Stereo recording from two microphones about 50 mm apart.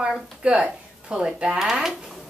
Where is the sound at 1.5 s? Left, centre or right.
Centre.